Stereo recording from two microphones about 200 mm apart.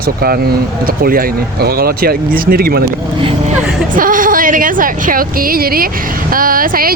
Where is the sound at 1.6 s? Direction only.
50° right (ahead or behind).